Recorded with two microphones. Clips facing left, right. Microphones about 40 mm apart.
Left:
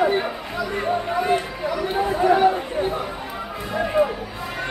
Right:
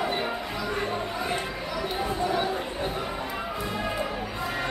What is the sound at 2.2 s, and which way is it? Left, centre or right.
Chatter, left.